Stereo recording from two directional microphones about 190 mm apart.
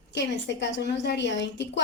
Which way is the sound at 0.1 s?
65° left (ahead or behind).